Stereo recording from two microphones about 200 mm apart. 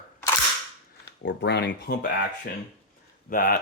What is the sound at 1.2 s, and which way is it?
Speech, 55° left (ahead or behind).